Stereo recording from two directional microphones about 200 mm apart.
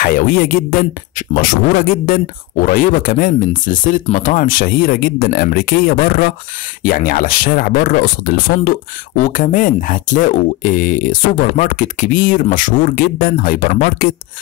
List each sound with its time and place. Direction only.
0.0 s speech: 45° left (ahead or behind)